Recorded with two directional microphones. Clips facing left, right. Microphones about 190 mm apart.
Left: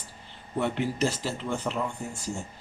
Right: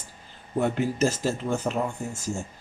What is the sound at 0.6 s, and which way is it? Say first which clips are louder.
Speech: right 3 dB; 45° right (ahead or behind).